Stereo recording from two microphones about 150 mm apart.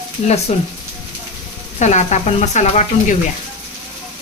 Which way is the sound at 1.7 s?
50° left (ahead or behind).